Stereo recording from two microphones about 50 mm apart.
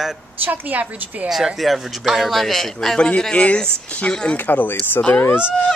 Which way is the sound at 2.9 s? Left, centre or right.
Centre.